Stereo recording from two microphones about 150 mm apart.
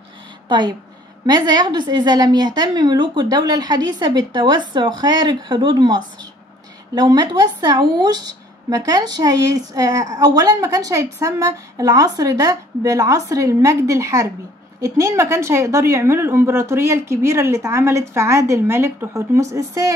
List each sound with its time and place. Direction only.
0.5 s a woman's voice: 30° right (ahead or behind)